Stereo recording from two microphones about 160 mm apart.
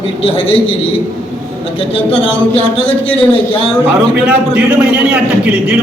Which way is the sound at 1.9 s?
35° left (ahead or behind).